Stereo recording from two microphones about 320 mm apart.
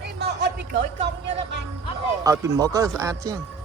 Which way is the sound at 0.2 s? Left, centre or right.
Right.